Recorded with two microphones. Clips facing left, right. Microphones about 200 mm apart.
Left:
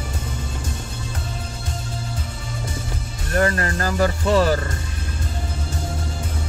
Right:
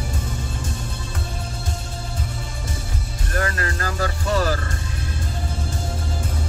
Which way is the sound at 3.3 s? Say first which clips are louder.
Left 5 dB; 30° left (ahead or behind).